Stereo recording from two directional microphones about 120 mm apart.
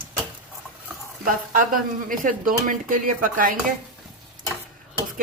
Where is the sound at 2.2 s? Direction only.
90° right.